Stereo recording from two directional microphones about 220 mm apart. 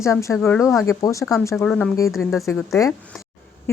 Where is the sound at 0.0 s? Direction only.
15° left (ahead or behind).